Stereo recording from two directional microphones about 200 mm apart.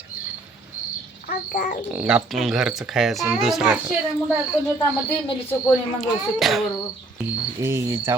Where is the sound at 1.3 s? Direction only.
45° left (ahead or behind).